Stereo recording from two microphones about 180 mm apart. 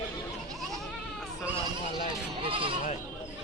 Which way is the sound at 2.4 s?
30° right (ahead or behind).